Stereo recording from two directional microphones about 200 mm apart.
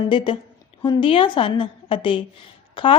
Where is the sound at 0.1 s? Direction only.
25° left (ahead or behind).